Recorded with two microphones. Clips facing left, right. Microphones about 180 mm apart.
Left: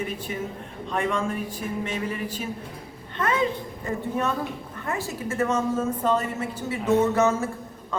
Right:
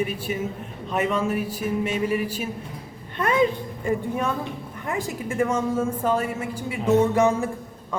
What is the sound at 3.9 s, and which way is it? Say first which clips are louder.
A woman's voice: right 2 dB; 10° right (ahead or behind).